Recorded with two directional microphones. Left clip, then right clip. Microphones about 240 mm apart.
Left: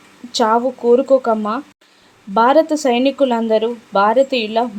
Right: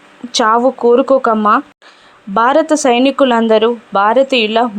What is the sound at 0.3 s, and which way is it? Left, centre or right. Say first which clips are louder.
Speech: right 4 dB; centre.